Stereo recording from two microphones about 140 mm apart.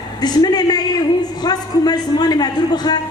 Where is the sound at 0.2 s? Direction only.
30° left (ahead or behind).